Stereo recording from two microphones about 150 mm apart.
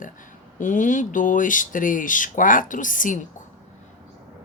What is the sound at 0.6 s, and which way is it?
Speech, 55° left (ahead or behind).